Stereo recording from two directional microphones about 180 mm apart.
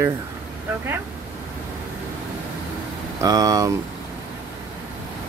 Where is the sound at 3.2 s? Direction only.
20° right (ahead or behind).